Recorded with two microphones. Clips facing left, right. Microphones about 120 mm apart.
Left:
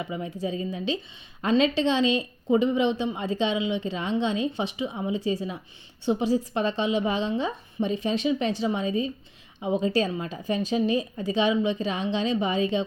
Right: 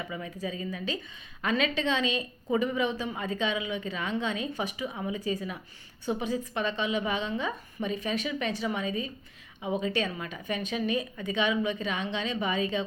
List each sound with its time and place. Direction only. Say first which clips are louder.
0.0 s speech: left 5 dB; 25° left (ahead or behind)